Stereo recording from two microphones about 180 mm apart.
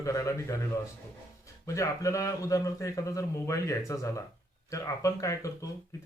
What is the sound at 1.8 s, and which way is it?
Speech, 15° left (ahead or behind).